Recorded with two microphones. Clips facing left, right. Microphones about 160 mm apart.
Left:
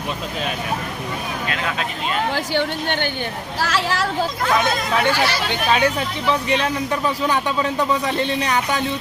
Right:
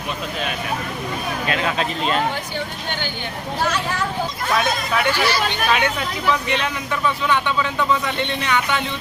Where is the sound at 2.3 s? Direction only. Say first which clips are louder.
Left 6 dB; 70° left (ahead or behind).